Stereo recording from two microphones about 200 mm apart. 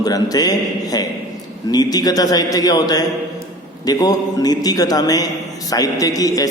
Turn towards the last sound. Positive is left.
turn(degrees=15)  # may be behind; listen again after turning